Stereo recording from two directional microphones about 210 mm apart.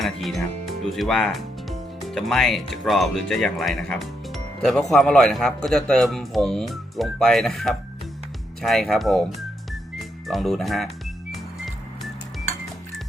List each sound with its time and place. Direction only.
0.0 s a man's voice: centre (ahead or behind)
10.2 s a man's voice: centre (ahead or behind)